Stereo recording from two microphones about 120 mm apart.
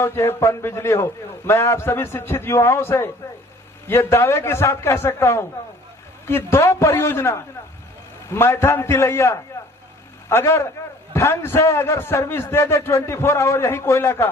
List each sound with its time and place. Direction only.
0.0 s a man's voice: 20° left (ahead or behind)